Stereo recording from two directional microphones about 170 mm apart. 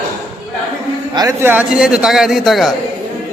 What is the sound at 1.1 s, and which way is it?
A man's voice, 20° right (ahead or behind).